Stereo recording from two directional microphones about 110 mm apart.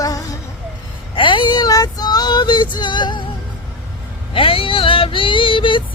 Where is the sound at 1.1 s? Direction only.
50° left (ahead or behind).